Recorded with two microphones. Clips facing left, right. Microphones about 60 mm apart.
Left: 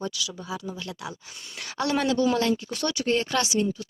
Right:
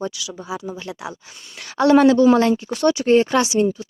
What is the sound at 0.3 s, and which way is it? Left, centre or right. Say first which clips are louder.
Speech: right 5 dB; centre.